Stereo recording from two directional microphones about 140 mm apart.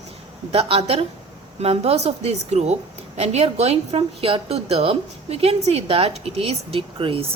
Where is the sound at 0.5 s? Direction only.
45° right (ahead or behind).